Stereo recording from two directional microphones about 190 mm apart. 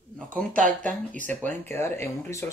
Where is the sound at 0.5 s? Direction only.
45° right (ahead or behind).